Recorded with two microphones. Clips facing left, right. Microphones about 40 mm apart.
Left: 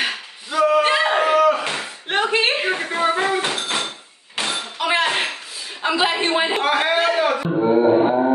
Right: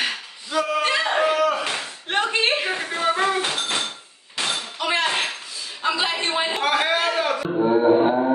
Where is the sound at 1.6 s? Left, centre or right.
Left.